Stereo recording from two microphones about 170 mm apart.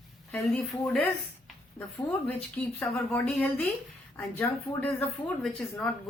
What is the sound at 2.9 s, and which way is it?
A woman's voice, 5° left (ahead or behind).